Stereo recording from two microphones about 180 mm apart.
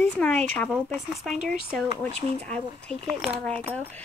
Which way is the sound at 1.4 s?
55° right (ahead or behind).